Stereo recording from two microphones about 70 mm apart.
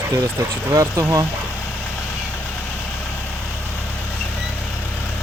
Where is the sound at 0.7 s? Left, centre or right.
Right.